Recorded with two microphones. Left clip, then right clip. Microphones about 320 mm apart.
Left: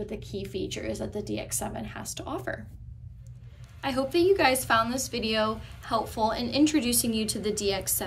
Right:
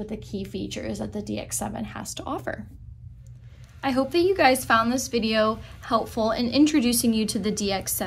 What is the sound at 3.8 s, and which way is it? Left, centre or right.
A woman's voice, centre.